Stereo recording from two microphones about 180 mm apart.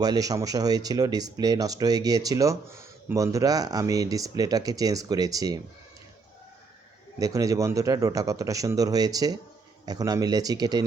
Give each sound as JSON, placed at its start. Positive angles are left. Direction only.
{"t": 0.0, "sound": "speech", "side_deg": -20}
{"t": 7.2, "sound": "speech", "side_deg": -20}